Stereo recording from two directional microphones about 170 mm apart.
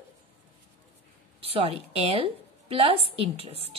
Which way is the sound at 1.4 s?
35° right (ahead or behind).